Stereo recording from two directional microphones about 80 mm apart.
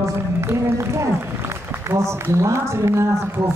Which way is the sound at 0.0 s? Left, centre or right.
Right.